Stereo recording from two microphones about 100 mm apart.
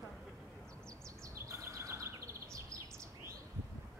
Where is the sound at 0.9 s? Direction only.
30° right (ahead or behind).